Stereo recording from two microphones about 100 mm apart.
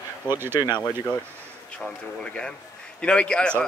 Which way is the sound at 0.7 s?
45° left (ahead or behind).